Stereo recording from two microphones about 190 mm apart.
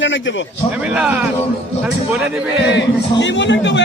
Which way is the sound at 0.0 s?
75° left (ahead or behind).